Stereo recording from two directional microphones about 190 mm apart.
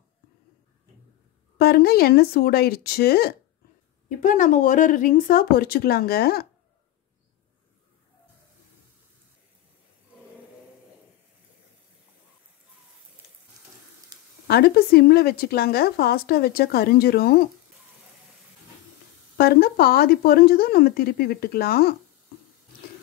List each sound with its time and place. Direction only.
1.6 s speech: 55° left (ahead or behind)
4.2 s a woman's voice: 45° left (ahead or behind)
14.1 s a sound: 20° right (ahead or behind)
14.5 s a woman's voice: 55° left (ahead or behind)
19.3 s a woman's voice: 50° left (ahead or behind)